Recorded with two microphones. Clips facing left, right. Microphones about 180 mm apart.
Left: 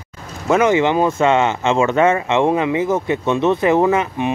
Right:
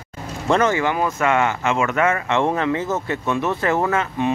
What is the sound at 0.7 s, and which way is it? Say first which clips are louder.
Speech: left 6 dB; 25° left (ahead or behind).